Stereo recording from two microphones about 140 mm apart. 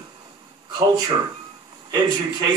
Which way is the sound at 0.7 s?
30° right (ahead or behind).